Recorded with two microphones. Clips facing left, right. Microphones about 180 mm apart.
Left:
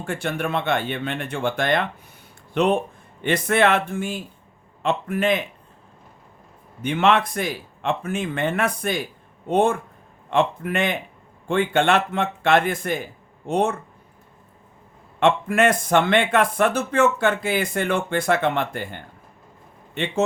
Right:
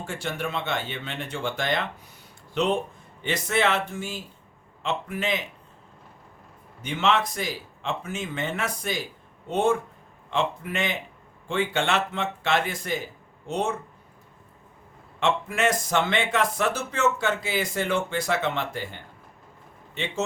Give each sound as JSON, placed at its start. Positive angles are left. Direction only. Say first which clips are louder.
{"t": 0.0, "sound": "speech", "louder": "left 5 dB", "side_deg": 55}
{"t": 6.8, "sound": "speech", "louder": "left 5 dB", "side_deg": 55}
{"t": 15.2, "sound": "speech", "louder": "left 6 dB", "side_deg": 55}